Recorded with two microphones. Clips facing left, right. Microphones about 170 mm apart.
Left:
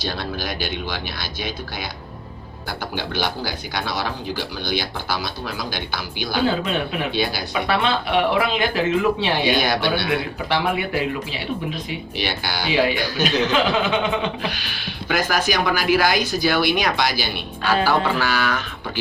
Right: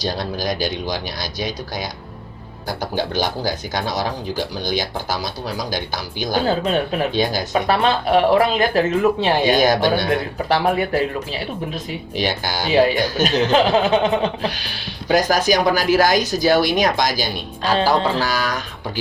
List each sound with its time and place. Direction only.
0.0 s speech: 40° right (ahead or behind)
2.6 s speech: 40° right (ahead or behind)